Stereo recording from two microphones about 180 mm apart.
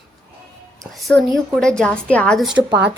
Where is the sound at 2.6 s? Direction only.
25° right (ahead or behind).